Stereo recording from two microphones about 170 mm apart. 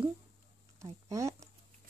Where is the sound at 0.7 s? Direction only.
20° right (ahead or behind).